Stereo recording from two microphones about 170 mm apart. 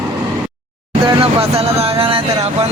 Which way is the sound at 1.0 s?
35° right (ahead or behind).